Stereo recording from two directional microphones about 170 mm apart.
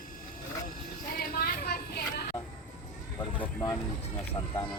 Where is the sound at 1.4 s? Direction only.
65° left (ahead or behind).